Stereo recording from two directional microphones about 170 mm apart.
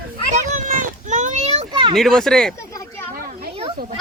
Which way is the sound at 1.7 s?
30° right (ahead or behind).